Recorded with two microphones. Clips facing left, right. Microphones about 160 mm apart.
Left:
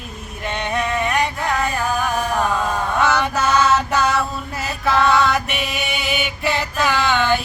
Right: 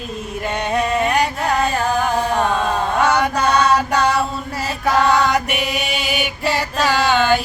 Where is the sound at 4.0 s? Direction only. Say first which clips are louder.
Right 2 dB; 30° right (ahead or behind).